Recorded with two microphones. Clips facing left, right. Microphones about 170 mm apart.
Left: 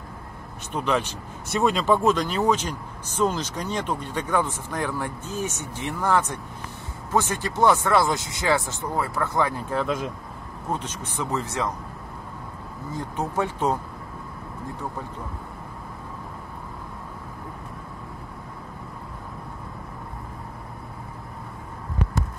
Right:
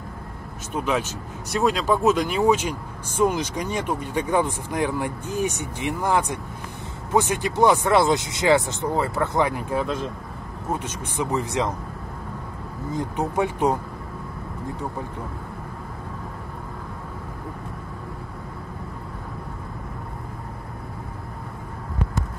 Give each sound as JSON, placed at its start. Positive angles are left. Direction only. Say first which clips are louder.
{"t": 0.7, "sound": "speech", "louder": "even", "side_deg": -5}
{"t": 11.1, "sound": "speech", "louder": "right 3 dB", "side_deg": -15}
{"t": 12.9, "sound": "speech", "louder": "right 3 dB", "side_deg": -15}